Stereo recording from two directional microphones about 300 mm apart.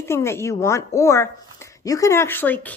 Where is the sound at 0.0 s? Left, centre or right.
Centre.